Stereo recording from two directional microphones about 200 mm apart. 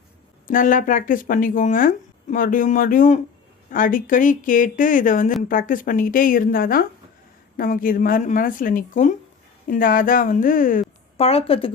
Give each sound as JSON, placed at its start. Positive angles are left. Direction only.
{"t": 0.4, "sound": "a woman's voice", "side_deg": 40}
{"t": 11.3, "sound": "a woman's voice", "side_deg": 30}